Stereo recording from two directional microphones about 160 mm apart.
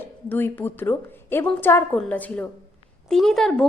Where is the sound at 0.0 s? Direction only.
10° left (ahead or behind).